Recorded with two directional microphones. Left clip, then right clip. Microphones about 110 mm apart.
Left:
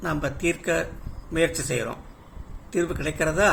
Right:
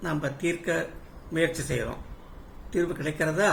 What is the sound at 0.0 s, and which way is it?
Speech, 15° left (ahead or behind).